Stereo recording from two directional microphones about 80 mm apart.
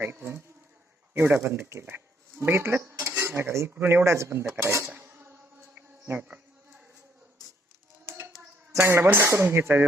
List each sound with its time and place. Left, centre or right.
0.0 s speech: right
3.2 s cutlery: right
3.7 s speech: right
4.9 s a sound: right
6.2 s a sound: centre
8.9 s speech: right